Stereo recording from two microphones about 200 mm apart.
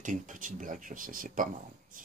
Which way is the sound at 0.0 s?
40° right (ahead or behind).